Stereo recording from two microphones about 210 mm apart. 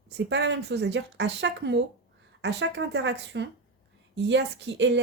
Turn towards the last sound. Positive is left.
turn(degrees=-55)  # may be behind; listen again after turning